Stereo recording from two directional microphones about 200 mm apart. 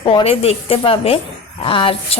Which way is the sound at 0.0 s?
25° left (ahead or behind).